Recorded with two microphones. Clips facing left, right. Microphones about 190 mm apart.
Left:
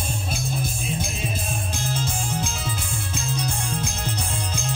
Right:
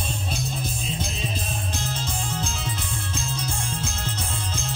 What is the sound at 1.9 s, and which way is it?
Music, 10° left (ahead or behind).